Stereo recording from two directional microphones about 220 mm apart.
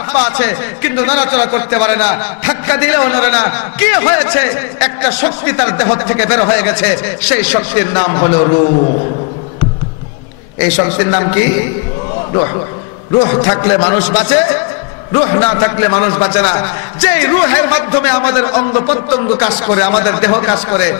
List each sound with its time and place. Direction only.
0.1 s a man's voice: 10° left (ahead or behind)
10.6 s a man's voice: 15° left (ahead or behind)
13.2 s a man's voice: 25° left (ahead or behind)